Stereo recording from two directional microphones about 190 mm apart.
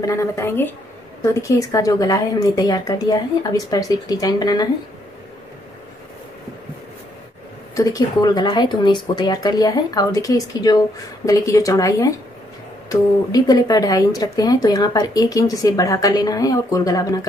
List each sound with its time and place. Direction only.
0.0 s speech: 15° left (ahead or behind)
7.7 s speech: 20° left (ahead or behind)
13.3 s speech: 20° left (ahead or behind)